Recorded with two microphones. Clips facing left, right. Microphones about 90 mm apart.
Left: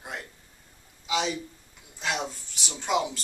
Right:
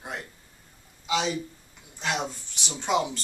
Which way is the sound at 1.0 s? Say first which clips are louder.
Right 1 dB; centre (ahead or behind).